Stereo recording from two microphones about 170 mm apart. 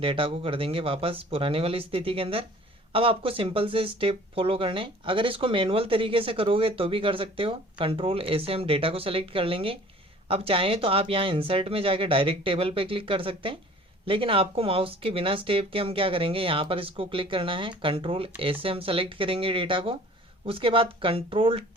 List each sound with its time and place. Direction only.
0.0 s speech: 30° right (ahead or behind)